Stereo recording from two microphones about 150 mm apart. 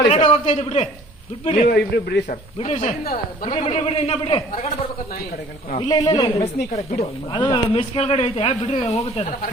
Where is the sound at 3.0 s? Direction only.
75° left (ahead or behind).